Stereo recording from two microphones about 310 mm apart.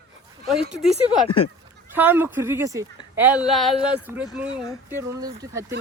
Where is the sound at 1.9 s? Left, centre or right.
Centre.